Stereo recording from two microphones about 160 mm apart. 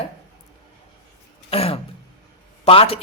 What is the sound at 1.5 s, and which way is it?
A man's voice, 40° left (ahead or behind).